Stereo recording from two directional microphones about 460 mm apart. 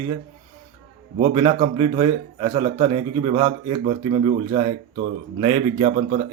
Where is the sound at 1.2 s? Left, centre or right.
Centre.